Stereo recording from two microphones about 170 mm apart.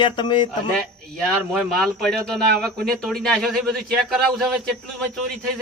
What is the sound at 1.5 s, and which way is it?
Speech, 5° left (ahead or behind).